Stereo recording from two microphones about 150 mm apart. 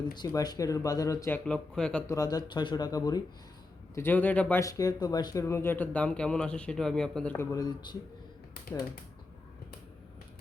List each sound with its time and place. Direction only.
0.1 s speech: 25° left (ahead or behind)
1.5 s speech: 5° left (ahead or behind)
2.0 s speech: 25° left (ahead or behind)
3.9 s speech: 15° left (ahead or behind)
4.6 s speech: 25° left (ahead or behind); by 7.3 s 5° left (ahead or behind)
7.3 s speech: 25° left (ahead or behind)